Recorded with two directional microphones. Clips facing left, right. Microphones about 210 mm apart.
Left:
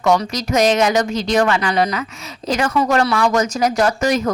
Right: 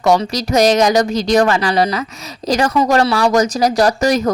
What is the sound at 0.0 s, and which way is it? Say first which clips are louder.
Speech: right 2 dB; 35° right (ahead or behind).